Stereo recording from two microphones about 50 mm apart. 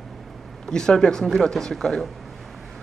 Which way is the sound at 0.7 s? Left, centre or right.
Centre.